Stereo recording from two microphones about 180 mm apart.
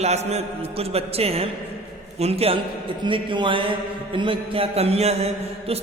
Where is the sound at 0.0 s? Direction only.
35° right (ahead or behind).